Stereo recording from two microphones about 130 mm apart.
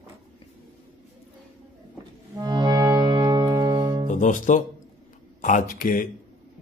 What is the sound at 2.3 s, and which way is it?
Music, 30° right (ahead or behind).